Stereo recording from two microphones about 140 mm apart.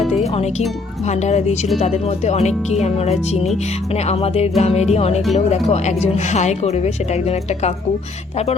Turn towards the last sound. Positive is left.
turn(degrees=50)  # may be behind; listen again after turning